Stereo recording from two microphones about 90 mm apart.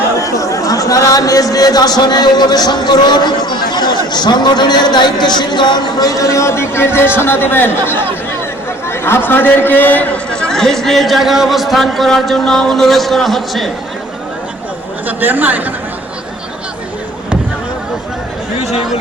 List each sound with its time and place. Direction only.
0.2 s a man's voice: 40° left (ahead or behind); by 10.5 s 20° left (ahead or behind)
10.5 s a man's voice: 5° left (ahead or behind)
15.0 s speech: 20° right (ahead or behind)